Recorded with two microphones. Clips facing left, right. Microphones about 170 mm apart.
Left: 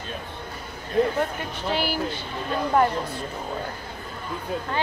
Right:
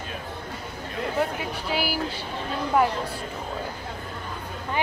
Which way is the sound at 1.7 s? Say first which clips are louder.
Left 2 dB; 5° right (ahead or behind).